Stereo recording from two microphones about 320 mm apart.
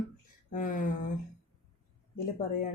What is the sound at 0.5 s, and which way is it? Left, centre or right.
Speech, left.